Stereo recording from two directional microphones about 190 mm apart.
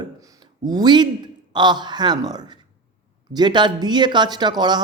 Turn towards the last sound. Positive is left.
turn(degrees=-20)  # may be behind; listen again after turning